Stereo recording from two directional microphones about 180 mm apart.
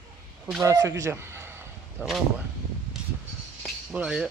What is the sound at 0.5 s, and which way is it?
A man's voice, 20° right (ahead or behind).